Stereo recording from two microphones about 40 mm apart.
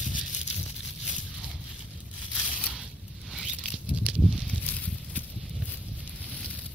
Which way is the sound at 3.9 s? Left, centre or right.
Right.